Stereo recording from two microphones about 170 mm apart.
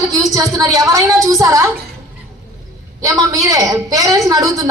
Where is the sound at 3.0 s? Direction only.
20° right (ahead or behind).